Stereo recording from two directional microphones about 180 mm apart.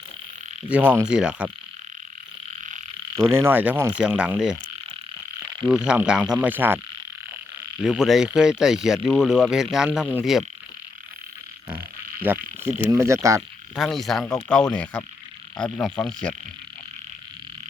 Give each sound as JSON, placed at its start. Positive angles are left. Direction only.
{"t": 0.9, "sound": "speech", "side_deg": -5}
{"t": 3.2, "sound": "frog", "side_deg": -15}
{"t": 5.6, "sound": "speech", "side_deg": -5}
{"t": 6.3, "sound": "frog", "side_deg": -10}
{"t": 7.8, "sound": "speech", "side_deg": 0}
{"t": 11.7, "sound": "frog", "side_deg": -10}
{"t": 13.7, "sound": "speech", "side_deg": 0}